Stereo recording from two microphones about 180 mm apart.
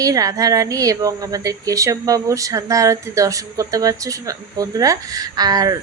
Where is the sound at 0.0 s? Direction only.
20° right (ahead or behind).